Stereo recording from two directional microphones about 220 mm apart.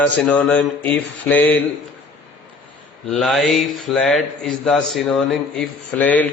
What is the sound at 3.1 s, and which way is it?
A man's voice, centre (ahead or behind).